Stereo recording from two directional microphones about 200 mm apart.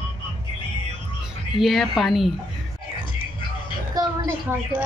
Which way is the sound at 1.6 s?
Centre (ahead or behind).